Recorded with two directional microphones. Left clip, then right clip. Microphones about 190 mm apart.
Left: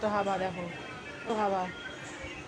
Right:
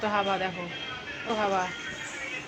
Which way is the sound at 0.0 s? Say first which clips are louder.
Right 3 dB; 25° right (ahead or behind).